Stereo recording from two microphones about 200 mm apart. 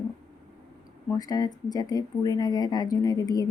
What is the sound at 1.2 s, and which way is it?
Speech, 20° left (ahead or behind).